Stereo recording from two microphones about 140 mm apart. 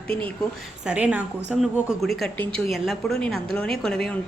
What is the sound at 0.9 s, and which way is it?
A woman's voice, 10° right (ahead or behind).